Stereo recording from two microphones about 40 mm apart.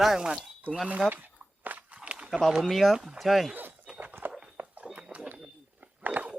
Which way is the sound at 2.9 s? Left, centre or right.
Centre.